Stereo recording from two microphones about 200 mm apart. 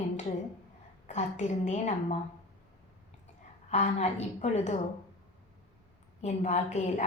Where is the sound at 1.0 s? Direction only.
35° left (ahead or behind).